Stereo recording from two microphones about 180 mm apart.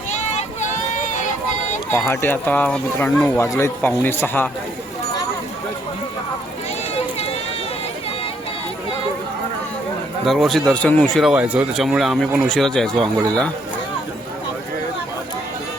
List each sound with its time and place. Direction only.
0.1 s a sound: 40° left (ahead or behind)
1.9 s speech: 15° left (ahead or behind)
10.2 s speech: centre (ahead or behind)